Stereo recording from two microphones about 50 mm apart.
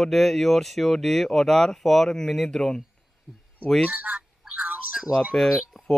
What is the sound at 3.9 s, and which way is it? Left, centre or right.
Speech, right.